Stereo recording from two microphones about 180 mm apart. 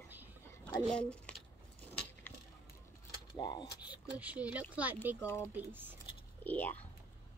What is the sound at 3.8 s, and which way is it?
Speech, 10° right (ahead or behind).